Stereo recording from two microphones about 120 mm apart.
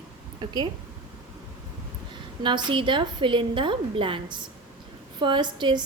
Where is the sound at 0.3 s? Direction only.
35° right (ahead or behind).